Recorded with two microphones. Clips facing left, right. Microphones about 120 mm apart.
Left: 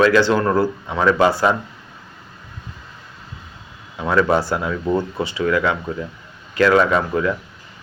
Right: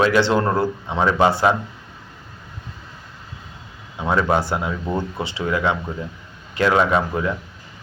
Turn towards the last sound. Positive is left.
turn(degrees=-20)  # may be behind; listen again after turning